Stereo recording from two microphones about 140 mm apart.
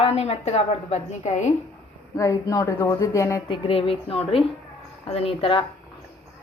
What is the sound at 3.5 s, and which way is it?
A woman's voice, 40° left (ahead or behind).